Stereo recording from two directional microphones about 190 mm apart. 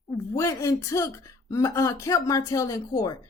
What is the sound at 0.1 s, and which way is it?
Speech, 15° left (ahead or behind).